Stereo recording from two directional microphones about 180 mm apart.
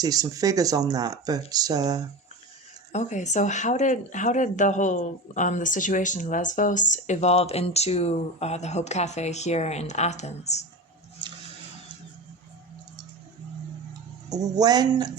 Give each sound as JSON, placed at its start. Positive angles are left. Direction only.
{"t": 0.0, "sound": "speech", "side_deg": -20}
{"t": 2.9, "sound": "speech", "side_deg": 40}
{"t": 14.3, "sound": "speech", "side_deg": -20}